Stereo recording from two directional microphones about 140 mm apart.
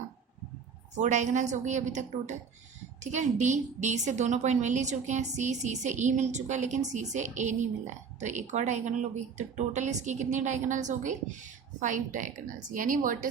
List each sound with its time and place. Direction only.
0.9 s a woman's voice: 60° right (ahead or behind)